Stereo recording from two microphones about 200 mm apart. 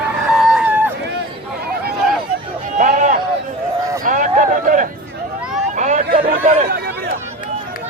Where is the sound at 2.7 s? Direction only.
40° right (ahead or behind).